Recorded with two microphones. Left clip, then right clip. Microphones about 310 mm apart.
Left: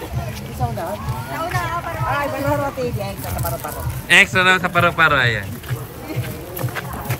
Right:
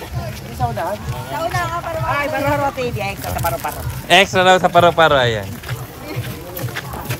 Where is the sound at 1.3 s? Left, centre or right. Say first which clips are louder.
Right 3 dB; right.